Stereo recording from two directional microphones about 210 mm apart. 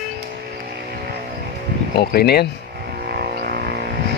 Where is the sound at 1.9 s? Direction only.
50° left (ahead or behind).